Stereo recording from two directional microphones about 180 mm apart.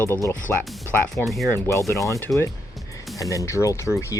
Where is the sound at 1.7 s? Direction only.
15° left (ahead or behind).